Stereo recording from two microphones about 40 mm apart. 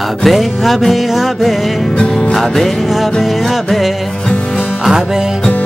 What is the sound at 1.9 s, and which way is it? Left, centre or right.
Music, centre.